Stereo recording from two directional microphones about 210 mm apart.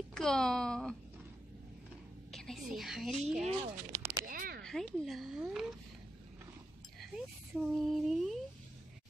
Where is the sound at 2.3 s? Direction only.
Centre (ahead or behind).